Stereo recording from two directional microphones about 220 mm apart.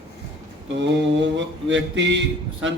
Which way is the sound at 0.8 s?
55° right (ahead or behind).